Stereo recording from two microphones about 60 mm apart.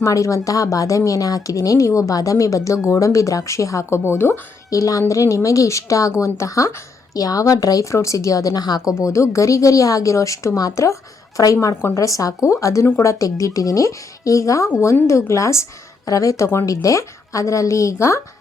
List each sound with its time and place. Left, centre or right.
0.0 s speech: left
7.1 s a woman's voice: left
7.9 s speech: left
9.0 s speech: left
11.7 s speech: left
11.9 s speech: left
13.4 s speech: left
16.0 s speech: left